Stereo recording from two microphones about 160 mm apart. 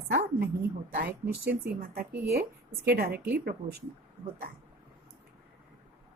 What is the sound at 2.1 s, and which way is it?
Speech, 80° right.